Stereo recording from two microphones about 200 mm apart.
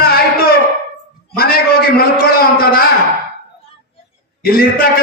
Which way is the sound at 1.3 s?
50° left (ahead or behind).